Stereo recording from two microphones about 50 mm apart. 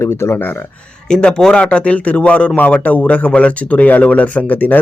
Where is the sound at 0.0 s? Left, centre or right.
Left.